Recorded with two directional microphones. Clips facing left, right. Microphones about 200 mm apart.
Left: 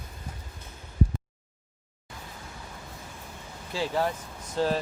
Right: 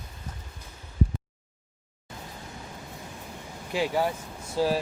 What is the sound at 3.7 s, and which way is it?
Speech, 10° right (ahead or behind).